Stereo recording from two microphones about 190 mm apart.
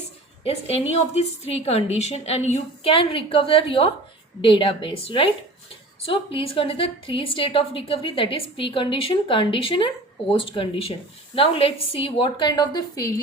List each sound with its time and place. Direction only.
0.4 s a woman's voice: 35° left (ahead or behind)